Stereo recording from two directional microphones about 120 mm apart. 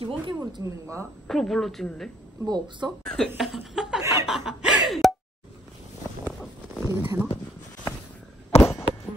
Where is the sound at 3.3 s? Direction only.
Centre (ahead or behind).